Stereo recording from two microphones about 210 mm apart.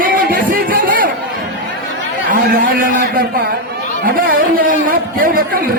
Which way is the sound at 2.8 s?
40° right (ahead or behind).